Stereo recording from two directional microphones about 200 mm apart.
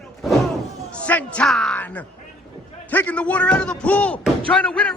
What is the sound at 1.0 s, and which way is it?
Speech, 5° left (ahead or behind).